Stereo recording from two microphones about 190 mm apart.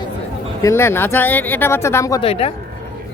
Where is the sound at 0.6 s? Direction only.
15° left (ahead or behind).